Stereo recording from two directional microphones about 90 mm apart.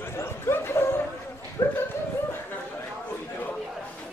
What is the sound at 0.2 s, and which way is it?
Dog, 30° left (ahead or behind).